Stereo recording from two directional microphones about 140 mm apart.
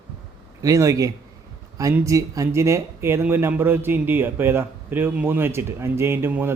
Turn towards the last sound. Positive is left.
turn(degrees=-15)  # may be behind; listen again after turning